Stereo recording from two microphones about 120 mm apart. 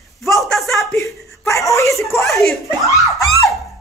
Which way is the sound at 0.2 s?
Centre (ahead or behind).